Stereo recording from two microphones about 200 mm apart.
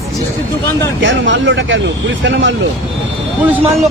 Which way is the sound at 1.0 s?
65° right (ahead or behind).